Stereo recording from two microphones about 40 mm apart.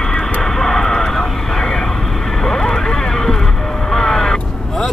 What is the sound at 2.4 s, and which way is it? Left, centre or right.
Speech, centre.